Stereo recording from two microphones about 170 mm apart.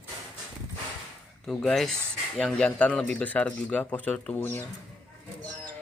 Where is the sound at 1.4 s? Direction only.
Centre (ahead or behind).